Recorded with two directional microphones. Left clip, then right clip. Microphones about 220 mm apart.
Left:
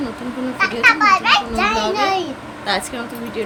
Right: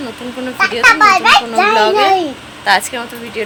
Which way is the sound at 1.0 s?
30° right (ahead or behind).